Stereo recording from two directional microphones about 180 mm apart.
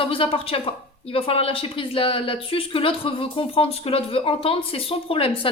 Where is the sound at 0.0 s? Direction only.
30° left (ahead or behind).